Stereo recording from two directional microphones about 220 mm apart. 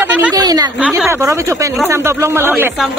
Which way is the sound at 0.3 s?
15° right (ahead or behind).